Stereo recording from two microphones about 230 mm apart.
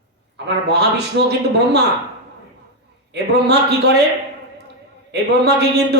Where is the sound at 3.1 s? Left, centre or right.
Right.